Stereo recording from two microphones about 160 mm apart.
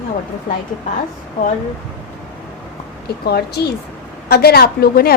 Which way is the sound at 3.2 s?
80° left.